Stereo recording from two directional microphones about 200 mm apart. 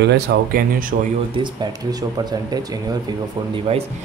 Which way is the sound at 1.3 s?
20° right (ahead or behind).